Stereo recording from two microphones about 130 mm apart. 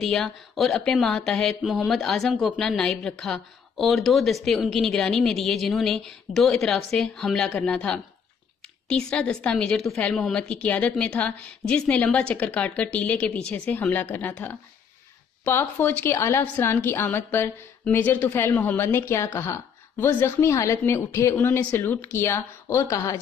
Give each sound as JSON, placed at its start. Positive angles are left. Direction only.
{"t": 0.0, "sound": "a woman's voice", "side_deg": 0}